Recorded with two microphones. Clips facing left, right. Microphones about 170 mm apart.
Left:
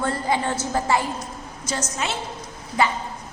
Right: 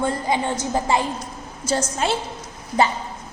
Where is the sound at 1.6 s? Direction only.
30° right (ahead or behind).